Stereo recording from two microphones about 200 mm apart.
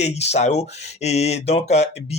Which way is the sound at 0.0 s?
35° left (ahead or behind).